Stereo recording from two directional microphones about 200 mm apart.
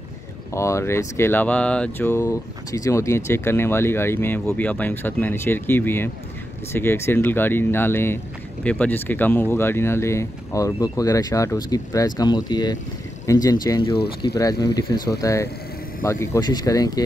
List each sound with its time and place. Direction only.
0.5 s speech: 15° left (ahead or behind)